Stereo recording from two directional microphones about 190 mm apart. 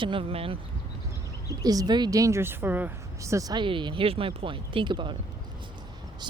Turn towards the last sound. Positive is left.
turn(degrees=-25)  # may be behind; listen again after turning